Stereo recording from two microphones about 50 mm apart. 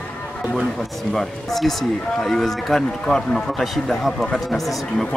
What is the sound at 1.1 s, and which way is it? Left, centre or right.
Speech, centre.